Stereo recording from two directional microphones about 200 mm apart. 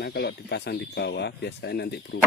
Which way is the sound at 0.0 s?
55° left (ahead or behind).